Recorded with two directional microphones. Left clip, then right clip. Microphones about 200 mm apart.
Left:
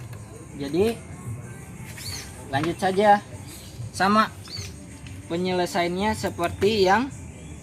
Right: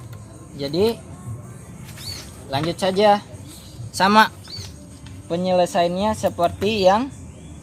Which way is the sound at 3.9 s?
55° right (ahead or behind).